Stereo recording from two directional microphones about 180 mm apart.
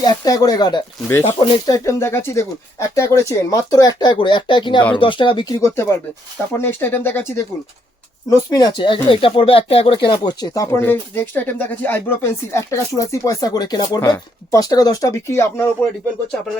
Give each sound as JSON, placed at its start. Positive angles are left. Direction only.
{"t": 0.0, "sound": "speech", "side_deg": 20}